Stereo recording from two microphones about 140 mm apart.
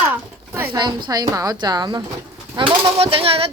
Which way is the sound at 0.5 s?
15° right (ahead or behind).